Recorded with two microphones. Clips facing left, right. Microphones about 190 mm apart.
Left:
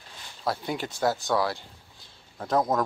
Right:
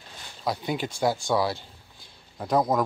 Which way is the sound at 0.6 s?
20° right (ahead or behind).